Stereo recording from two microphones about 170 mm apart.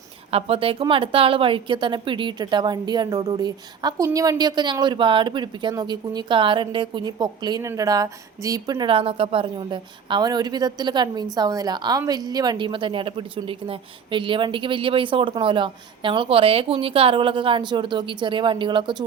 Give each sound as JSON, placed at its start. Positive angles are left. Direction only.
{"t": 0.3, "sound": "a woman's voice", "side_deg": -35}